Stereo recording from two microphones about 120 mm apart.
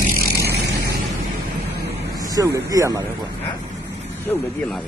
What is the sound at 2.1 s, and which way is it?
Speech, 30° right (ahead or behind).